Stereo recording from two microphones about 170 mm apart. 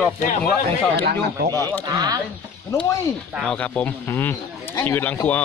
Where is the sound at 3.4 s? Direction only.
5° left (ahead or behind).